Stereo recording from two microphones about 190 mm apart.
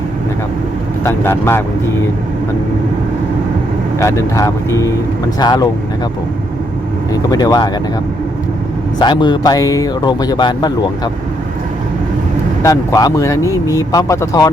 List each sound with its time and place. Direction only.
1.0 s speech: 15° left (ahead or behind)
3.9 s speech: 15° left (ahead or behind)
7.1 s speech: 20° left (ahead or behind)
9.0 s speech: 25° left (ahead or behind)
12.6 s speech: 20° left (ahead or behind)